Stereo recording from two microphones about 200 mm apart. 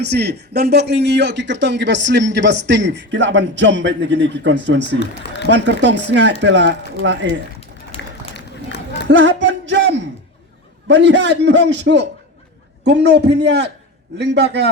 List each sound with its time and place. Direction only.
0.0 s speech: 55° right (ahead or behind)
4.9 s speech: 60° left (ahead or behind)
5.5 s speech: 60° right (ahead or behind)
7.9 s run: 30° left (ahead or behind)
9.0 s speech: 65° right (ahead or behind)